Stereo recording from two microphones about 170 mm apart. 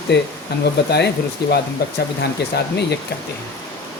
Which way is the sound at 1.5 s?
70° left (ahead or behind).